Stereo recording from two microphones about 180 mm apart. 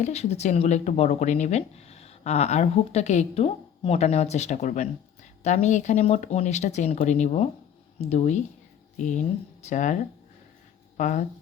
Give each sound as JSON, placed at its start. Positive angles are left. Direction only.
{"t": 0.0, "sound": "speech", "side_deg": 35}